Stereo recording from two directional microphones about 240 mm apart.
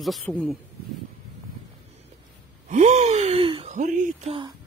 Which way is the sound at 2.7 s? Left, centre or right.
Right.